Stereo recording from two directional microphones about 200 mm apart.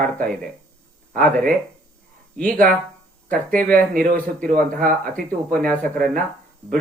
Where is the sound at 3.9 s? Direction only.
45° right (ahead or behind).